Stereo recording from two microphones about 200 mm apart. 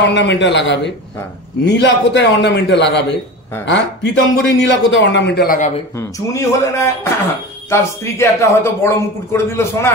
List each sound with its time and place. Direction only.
0.1 s a man's voice: 65° left (ahead or behind)
5.9 s a man's voice: 15° left (ahead or behind)